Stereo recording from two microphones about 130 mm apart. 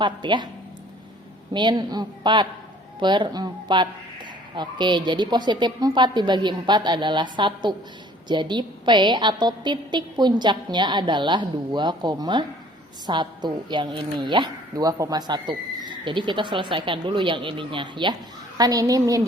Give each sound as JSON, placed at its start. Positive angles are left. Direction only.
{"t": 0.0, "sound": "a woman's voice", "side_deg": -35}
{"t": 1.5, "sound": "a woman's voice", "side_deg": -35}